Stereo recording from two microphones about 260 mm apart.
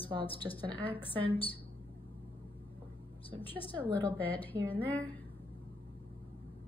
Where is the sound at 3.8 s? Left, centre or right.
Centre.